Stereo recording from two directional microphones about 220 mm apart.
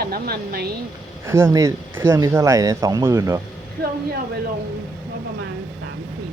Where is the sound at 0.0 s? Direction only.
45° right (ahead or behind).